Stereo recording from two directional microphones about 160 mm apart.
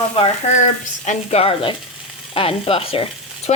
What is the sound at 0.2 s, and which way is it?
Speech, 45° left (ahead or behind).